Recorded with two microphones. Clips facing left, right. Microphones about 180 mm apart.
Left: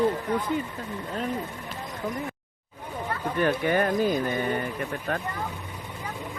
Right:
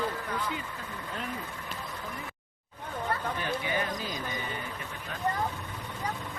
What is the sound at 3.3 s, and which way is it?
Speech, 55° left (ahead or behind).